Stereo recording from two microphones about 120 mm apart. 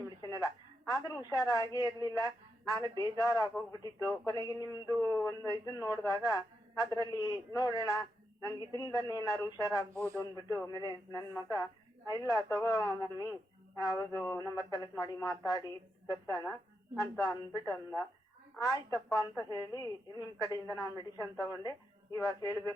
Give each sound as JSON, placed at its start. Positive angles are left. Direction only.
{"t": 0.2, "sound": "a woman's voice", "side_deg": 35}
{"t": 9.9, "sound": "speech", "side_deg": -25}
{"t": 10.5, "sound": "a man's voice", "side_deg": 30}
{"t": 18.6, "sound": "a man's voice", "side_deg": 30}